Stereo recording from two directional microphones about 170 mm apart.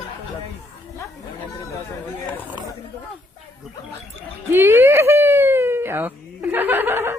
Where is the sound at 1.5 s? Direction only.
15° left (ahead or behind).